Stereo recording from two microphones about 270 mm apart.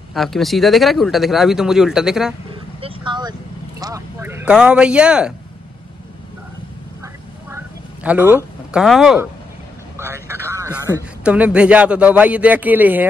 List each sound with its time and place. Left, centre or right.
0.1 s speech: centre
2.5 s vehicle: centre
3.8 s speech: centre
7.5 s a sound: centre
8.7 s speech: centre
9.9 s a sound: centre
11.2 s speech: centre